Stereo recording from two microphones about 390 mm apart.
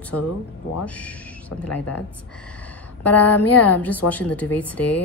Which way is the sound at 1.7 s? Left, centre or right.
Left.